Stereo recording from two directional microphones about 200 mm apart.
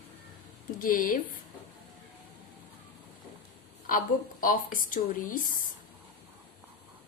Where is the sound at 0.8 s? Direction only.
45° left (ahead or behind).